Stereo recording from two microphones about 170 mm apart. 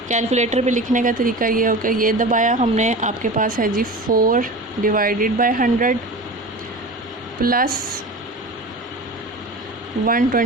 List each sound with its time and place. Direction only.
0.1 s a woman's voice: 45° right (ahead or behind)
7.4 s speech: 60° right (ahead or behind)
10.1 s speech: 55° right (ahead or behind)